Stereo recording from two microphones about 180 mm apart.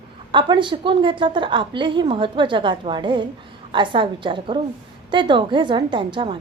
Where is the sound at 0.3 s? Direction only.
25° right (ahead or behind).